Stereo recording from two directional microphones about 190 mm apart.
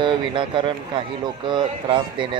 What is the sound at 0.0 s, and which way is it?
Speech, 25° right (ahead or behind).